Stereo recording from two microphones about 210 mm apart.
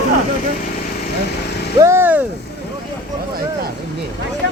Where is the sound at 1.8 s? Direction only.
10° right (ahead or behind).